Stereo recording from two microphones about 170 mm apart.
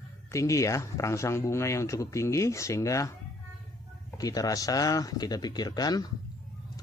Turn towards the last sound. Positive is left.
turn(degrees=25)  # may be behind; listen again after turning